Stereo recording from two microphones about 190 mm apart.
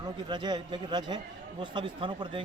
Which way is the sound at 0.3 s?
25° right (ahead or behind).